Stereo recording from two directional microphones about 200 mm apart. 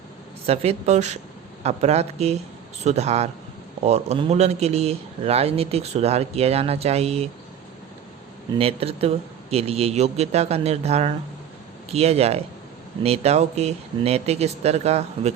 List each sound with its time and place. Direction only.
0.4 s speech: 30° right (ahead or behind)
8.5 s speech: 30° right (ahead or behind)